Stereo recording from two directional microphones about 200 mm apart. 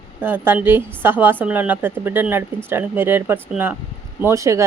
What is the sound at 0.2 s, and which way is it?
Speech, 10° right (ahead or behind).